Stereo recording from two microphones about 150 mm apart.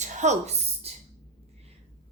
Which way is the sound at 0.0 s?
50° right (ahead or behind).